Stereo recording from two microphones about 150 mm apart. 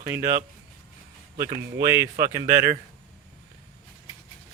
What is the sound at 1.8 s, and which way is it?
Speech, 20° right (ahead or behind).